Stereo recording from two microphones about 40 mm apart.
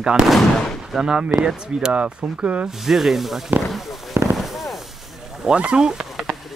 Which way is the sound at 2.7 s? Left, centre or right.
Centre.